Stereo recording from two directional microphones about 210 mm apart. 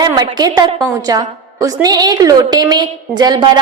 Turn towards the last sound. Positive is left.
turn(degrees=-20)  # may be behind; listen again after turning